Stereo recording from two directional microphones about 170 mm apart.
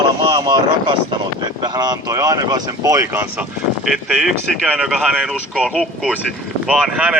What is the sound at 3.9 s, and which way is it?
Speech, centre (ahead or behind).